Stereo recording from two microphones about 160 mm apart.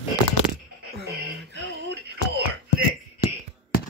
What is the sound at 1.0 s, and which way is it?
Music, 90° right.